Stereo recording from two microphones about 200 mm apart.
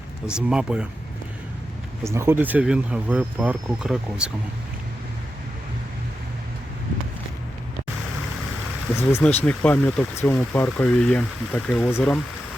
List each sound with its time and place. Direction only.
0.3 s speech: 5° right (ahead or behind)
2.0 s speech: 15° right (ahead or behind)
9.0 s speech: 10° left (ahead or behind)